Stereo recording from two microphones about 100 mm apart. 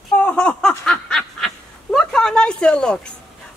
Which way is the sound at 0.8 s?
5° left (ahead or behind).